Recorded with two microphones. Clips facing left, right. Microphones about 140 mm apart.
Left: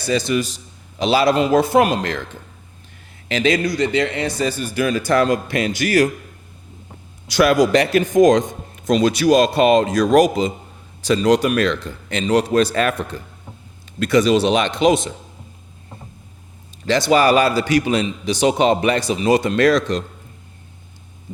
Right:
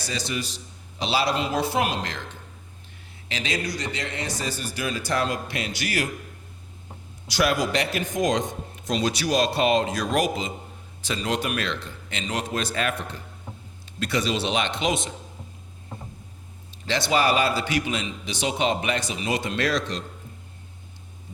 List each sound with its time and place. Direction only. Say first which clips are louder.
0.0 s a man's voice: left 11 dB; 55° left (ahead or behind)
3.2 s a man's voice: left 11 dB; 55° left (ahead or behind)
7.6 s a man's voice: left 10 dB; 50° left (ahead or behind)
16.8 s a man's voice: left 8 dB; 45° left (ahead or behind)